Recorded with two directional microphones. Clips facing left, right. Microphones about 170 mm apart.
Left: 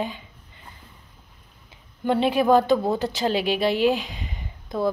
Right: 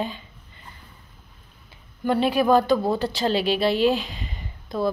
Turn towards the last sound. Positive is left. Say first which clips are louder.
# even
turn(degrees=20)  # may be behind; listen again after turning